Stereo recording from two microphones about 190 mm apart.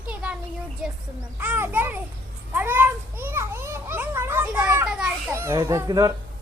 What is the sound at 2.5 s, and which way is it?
Children playing, 10° right (ahead or behind).